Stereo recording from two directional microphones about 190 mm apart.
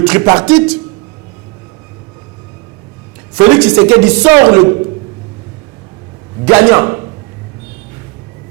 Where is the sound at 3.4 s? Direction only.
20° right (ahead or behind).